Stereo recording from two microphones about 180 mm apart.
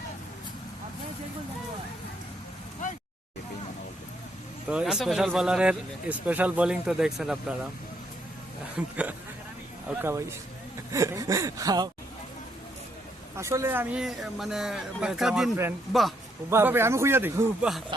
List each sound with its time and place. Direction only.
4.7 s speech: 5° right (ahead or behind)
8.7 s a man's voice: 10° right (ahead or behind)
10.9 s a sound: 15° right (ahead or behind)
13.3 s speech: 15° right (ahead or behind); by 16.1 s centre (ahead or behind)
16.5 s a man's voice: 15° right (ahead or behind)